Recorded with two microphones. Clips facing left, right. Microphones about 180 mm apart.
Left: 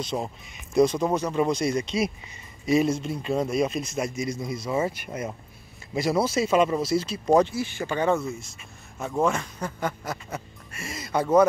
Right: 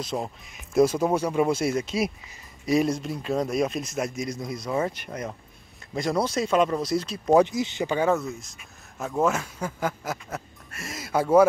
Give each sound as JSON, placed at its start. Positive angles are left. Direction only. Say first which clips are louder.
{"t": 0.0, "sound": "speech", "louder": "left 1 dB", "side_deg": 0}
{"t": 7.4, "sound": "speech", "louder": "right 2 dB", "side_deg": -20}
{"t": 8.0, "sound": "speech", "louder": "left 1 dB", "side_deg": 0}